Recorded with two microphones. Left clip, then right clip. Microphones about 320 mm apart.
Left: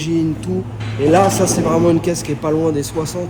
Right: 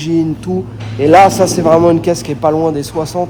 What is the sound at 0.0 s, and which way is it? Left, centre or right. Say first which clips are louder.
Speech: right 4 dB; centre.